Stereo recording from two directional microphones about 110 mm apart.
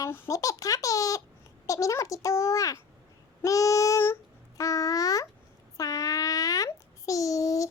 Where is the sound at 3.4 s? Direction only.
30° left (ahead or behind).